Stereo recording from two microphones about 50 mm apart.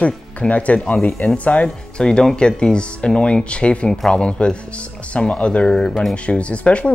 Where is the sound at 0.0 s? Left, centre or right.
Left.